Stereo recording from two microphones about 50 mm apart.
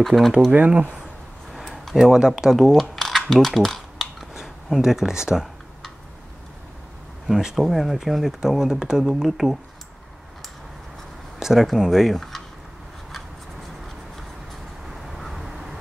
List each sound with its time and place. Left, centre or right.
0.0 s speech: centre
0.5 s speech: right
1.5 s a sound: centre
2.8 s typing: centre
4.3 s speech: centre
7.2 s speech: centre
11.3 s speech: centre
12.2 s a sound: centre
14.9 s vehicle: centre